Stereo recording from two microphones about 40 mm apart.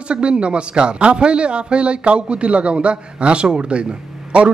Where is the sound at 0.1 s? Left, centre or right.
Right.